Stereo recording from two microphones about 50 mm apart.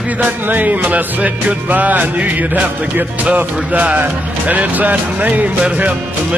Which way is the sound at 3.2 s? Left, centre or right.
Right.